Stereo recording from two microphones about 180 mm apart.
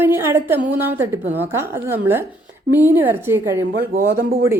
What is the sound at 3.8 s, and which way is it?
Speech, 55° right (ahead or behind).